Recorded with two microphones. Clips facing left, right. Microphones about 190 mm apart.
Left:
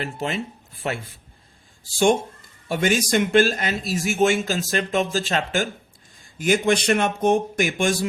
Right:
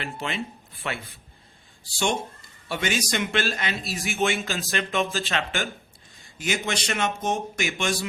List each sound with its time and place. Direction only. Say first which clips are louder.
0.0 s a man's voice: left 4 dB; 45° left (ahead or behind)
2.6 s a man's voice: left 6 dB; 45° left (ahead or behind)